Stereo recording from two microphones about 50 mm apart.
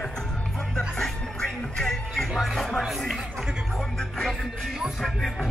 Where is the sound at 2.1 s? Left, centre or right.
Centre.